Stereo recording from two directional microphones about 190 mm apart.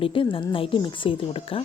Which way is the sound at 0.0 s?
30° left (ahead or behind).